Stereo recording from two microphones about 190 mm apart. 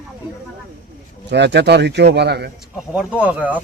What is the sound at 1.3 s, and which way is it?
A man's voice, 65° right (ahead or behind).